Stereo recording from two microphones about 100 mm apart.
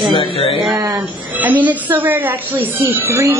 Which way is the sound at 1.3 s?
15° right (ahead or behind).